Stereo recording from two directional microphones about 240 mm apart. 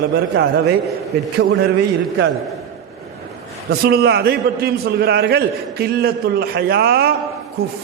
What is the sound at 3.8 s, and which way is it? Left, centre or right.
A man's voice, right.